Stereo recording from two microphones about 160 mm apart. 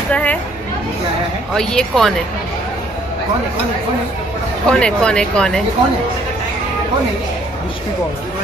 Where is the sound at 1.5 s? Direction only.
5° left (ahead or behind).